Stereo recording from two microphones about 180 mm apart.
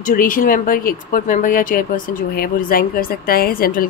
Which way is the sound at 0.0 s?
50° left (ahead or behind).